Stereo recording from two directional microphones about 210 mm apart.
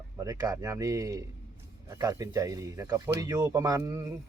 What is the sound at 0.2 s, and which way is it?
Speech, 15° right (ahead or behind).